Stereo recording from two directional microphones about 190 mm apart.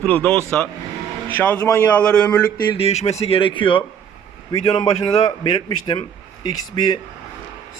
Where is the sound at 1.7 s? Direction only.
5° left (ahead or behind).